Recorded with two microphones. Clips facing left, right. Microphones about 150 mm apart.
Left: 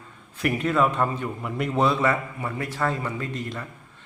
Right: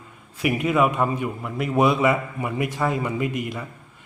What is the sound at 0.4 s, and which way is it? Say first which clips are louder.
Speech: right 2 dB; 10° right (ahead or behind).